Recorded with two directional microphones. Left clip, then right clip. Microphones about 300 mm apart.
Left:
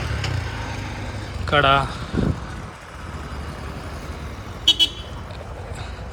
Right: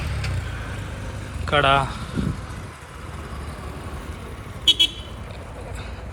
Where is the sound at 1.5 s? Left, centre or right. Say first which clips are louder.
Left 1 dB; centre.